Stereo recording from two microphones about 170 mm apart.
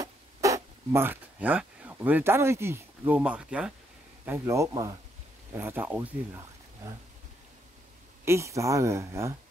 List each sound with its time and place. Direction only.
0.0 s speech: 20° right (ahead or behind)
4.3 s speech: 15° right (ahead or behind)
8.3 s speech: 15° right (ahead or behind)